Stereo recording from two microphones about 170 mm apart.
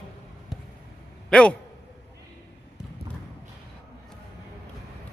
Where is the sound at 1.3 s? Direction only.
5° left (ahead or behind).